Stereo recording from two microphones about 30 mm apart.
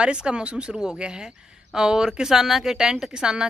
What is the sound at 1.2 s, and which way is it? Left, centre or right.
Speech, right.